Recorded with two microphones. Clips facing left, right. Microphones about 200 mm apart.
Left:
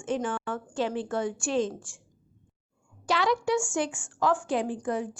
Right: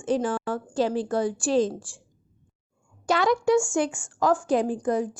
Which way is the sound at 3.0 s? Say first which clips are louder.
Right 4 dB; 45° right (ahead or behind).